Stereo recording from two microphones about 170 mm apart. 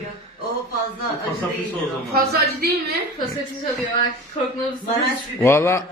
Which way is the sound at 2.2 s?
65° right (ahead or behind).